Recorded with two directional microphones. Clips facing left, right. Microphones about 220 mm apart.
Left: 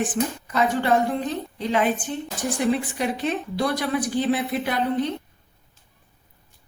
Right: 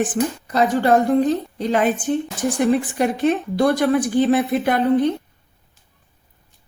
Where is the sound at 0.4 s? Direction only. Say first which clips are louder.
Right 5 dB; 35° right (ahead or behind).